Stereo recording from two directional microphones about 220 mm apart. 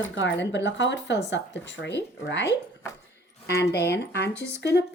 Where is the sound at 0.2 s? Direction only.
55° left (ahead or behind).